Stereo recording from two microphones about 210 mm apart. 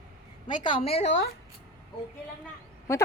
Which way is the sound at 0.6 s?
25° left (ahead or behind).